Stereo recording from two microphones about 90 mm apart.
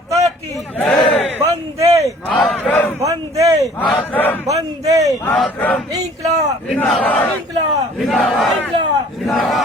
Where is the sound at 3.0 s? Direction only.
40° right (ahead or behind).